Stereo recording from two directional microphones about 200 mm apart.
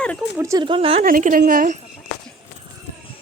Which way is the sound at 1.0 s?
45° right (ahead or behind).